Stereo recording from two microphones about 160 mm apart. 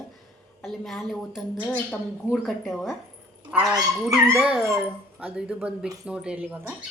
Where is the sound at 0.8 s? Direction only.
Centre (ahead or behind).